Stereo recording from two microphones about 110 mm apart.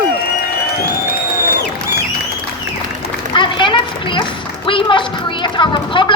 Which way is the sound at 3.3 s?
45° left (ahead or behind).